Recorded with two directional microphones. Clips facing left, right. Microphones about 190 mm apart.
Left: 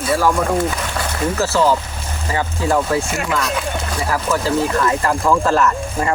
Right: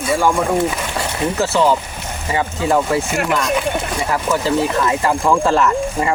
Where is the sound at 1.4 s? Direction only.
Centre (ahead or behind).